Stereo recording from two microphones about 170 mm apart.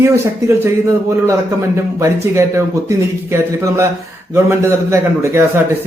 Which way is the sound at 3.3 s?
15° right (ahead or behind).